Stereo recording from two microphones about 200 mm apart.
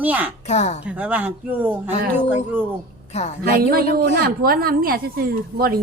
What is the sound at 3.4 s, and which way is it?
A woman's voice, 50° right (ahead or behind).